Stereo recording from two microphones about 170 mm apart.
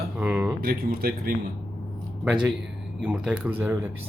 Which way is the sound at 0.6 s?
65° right (ahead or behind).